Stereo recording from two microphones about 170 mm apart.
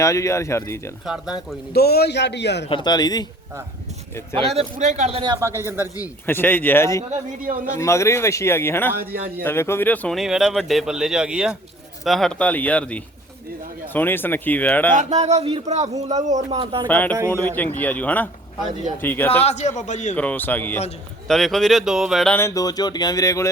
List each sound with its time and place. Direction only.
0.0 s speech: 20° left (ahead or behind)
1.0 s speech: 5° right (ahead or behind)
1.7 s a man's voice: 70° left (ahead or behind); by 2.6 s 85° left
2.6 s speech: 25° left (ahead or behind)
4.4 s a man's voice: 35° right (ahead or behind)
5.5 s a man's voice: 15° right (ahead or behind)
6.0 s speech: 15° left (ahead or behind)
7.1 s a man's voice: 55° right (ahead or behind)
7.8 s speech: 15° left (ahead or behind)
14.9 s a man's voice: 45° right (ahead or behind)
16.8 s speech: 10° left (ahead or behind)
19.4 s a man's voice: 40° left (ahead or behind)
20.1 s speech: 10° left (ahead or behind)
22.4 s speech: 20° left (ahead or behind)